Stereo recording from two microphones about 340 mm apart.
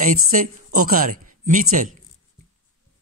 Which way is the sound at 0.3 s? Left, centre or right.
Right.